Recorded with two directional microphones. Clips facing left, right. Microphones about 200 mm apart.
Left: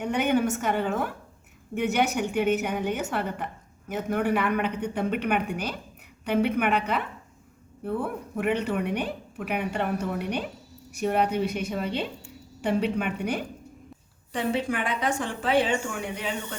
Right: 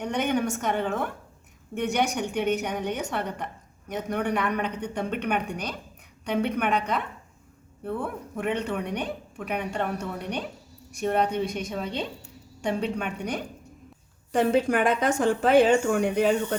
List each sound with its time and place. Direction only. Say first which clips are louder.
0.0 s a woman's voice: left 2 dB; 5° left (ahead or behind)
14.3 s a woman's voice: right 5 dB; 45° right (ahead or behind)